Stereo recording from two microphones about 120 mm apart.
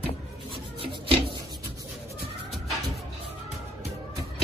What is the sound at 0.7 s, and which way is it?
Rub, 50° right (ahead or behind).